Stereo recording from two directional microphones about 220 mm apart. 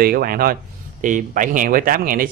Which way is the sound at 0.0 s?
40° right (ahead or behind).